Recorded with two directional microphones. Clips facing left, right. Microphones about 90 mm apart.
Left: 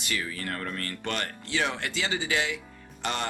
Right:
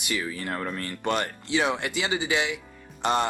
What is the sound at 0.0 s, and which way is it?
Speech, 20° right (ahead or behind).